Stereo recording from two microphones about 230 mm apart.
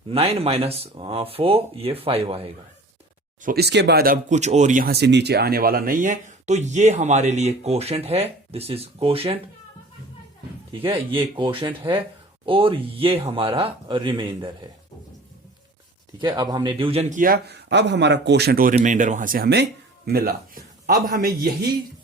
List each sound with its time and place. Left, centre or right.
0.1 s speech: right
3.4 s speech: right
10.7 s speech: right
16.1 s speech: centre; by 21.3 s right